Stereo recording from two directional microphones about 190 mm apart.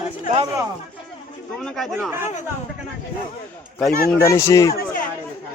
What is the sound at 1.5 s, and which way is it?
Speech, centre (ahead or behind).